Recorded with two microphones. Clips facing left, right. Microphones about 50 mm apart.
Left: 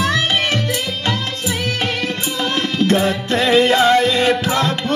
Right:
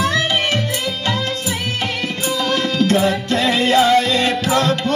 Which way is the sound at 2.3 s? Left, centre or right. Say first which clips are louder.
Right 1 dB; left.